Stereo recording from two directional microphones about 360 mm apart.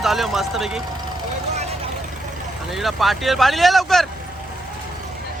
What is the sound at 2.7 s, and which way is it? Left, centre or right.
Speech, centre.